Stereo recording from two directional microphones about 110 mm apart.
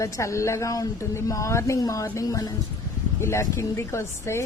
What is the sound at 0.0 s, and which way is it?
Speech, 25° left (ahead or behind).